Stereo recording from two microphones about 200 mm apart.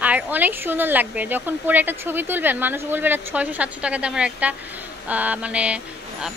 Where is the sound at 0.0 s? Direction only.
10° right (ahead or behind).